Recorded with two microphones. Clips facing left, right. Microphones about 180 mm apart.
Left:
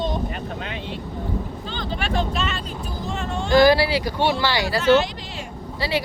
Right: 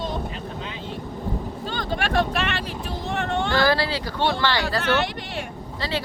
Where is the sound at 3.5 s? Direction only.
15° left (ahead or behind).